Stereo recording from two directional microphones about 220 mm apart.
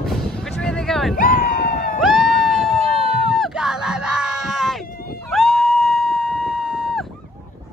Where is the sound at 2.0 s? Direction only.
Centre (ahead or behind).